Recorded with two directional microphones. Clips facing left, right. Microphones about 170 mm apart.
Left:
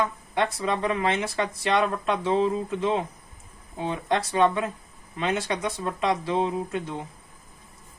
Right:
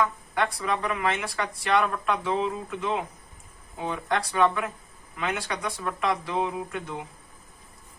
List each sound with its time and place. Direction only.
0.0 s speech: 25° left (ahead or behind)